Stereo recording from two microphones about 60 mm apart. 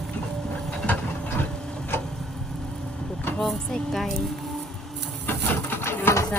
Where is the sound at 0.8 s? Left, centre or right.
Left.